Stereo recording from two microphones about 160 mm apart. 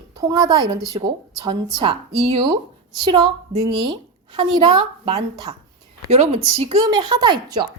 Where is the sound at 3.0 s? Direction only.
25° right (ahead or behind).